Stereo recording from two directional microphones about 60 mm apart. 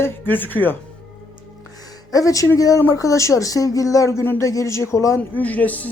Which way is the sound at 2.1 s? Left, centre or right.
Left.